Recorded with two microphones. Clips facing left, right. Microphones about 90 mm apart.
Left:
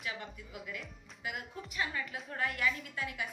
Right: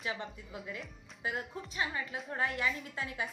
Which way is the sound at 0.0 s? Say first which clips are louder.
Right 3 dB; 30° right (ahead or behind).